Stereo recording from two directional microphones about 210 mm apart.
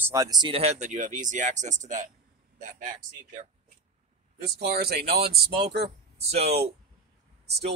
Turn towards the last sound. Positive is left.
turn(degrees=-50)  # may be behind; listen again after turning